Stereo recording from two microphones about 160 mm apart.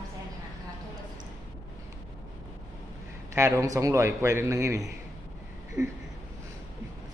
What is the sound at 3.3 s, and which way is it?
A man's voice, 20° right (ahead or behind).